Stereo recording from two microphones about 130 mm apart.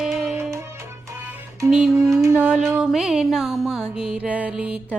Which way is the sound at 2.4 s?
5° right (ahead or behind).